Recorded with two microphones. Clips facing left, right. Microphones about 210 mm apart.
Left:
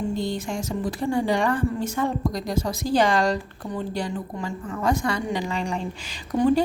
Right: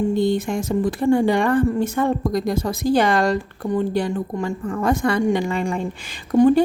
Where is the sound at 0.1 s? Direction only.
55° right (ahead or behind).